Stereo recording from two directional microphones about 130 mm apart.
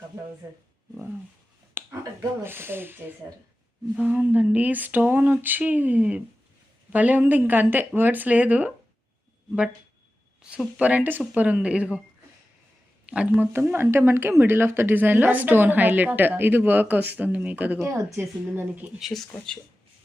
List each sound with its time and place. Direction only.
1.8 s finger snapping: 15° right (ahead or behind)
2.4 s speech: 15° right (ahead or behind)
10.4 s speech: 10° right (ahead or behind)
13.1 s speech: 10° right (ahead or behind)
17.7 s speech: 25° right (ahead or behind)
18.9 s speech: centre (ahead or behind)